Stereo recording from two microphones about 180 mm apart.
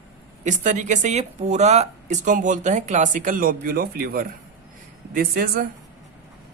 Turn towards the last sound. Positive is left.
turn(degrees=-55)  # may be behind; listen again after turning